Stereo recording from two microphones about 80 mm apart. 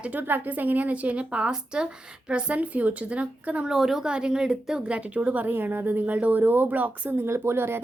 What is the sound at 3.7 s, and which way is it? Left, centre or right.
A woman's voice, centre.